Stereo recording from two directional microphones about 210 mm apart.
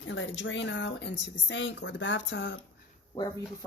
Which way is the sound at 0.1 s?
60° left (ahead or behind).